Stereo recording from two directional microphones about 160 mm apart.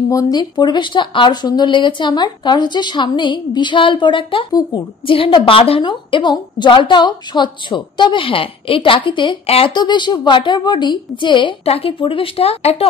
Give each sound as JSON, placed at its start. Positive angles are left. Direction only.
{"t": 0.1, "sound": "speech", "side_deg": 25}